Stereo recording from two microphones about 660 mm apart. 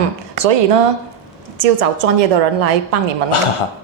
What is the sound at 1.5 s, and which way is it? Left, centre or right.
A woman's voice, right.